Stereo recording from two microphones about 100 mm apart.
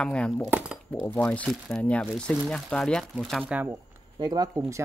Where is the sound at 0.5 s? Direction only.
10° right (ahead or behind).